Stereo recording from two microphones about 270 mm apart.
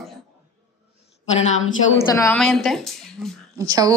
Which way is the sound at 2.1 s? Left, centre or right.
Centre.